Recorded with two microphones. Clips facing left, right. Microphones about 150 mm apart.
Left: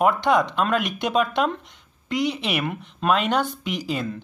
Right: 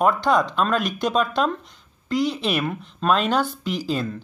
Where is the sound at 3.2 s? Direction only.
65° left (ahead or behind).